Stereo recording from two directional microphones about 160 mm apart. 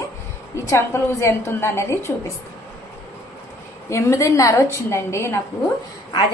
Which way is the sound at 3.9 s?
20° left (ahead or behind).